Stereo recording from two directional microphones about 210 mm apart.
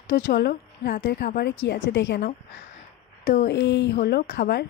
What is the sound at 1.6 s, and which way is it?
A woman's voice, 60° left (ahead or behind).